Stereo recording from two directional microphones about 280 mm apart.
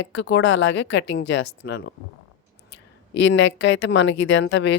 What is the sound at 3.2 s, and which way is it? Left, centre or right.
A woman's voice, left.